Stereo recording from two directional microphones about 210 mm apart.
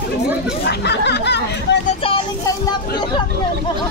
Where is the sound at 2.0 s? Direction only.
25° left (ahead or behind).